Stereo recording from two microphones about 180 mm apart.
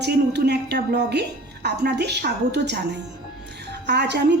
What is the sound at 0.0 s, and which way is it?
Speech, 65° right (ahead or behind).